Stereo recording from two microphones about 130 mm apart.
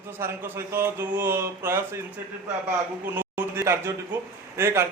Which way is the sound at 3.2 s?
15° right (ahead or behind).